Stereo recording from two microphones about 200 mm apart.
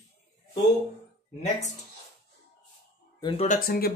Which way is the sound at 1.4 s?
35° left (ahead or behind).